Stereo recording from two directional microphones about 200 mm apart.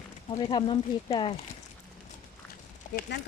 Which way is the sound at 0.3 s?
20° left (ahead or behind).